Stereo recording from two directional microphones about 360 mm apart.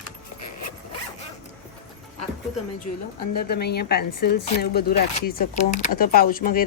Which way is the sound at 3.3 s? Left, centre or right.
Left.